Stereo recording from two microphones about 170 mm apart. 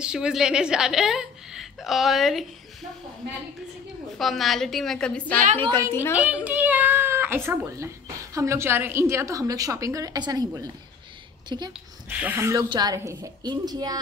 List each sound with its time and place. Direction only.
0.0 s a woman's voice: 5° right (ahead or behind)
4.2 s a woman's voice: centre (ahead or behind)
6.1 s a child's voice: 10° right (ahead or behind); by 11.7 s 25° right (ahead or behind)
12.1 s a woman's voice: 10° right (ahead or behind)